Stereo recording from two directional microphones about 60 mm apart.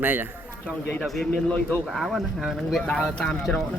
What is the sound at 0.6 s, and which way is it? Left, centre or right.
Speech, left.